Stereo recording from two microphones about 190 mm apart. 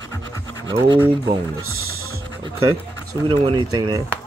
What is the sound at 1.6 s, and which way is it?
Music, 90° right.